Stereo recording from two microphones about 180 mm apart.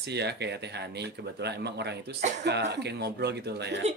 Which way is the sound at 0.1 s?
70° right (ahead or behind).